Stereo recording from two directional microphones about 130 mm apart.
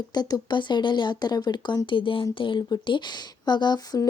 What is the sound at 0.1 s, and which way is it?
Speech, 30° left (ahead or behind).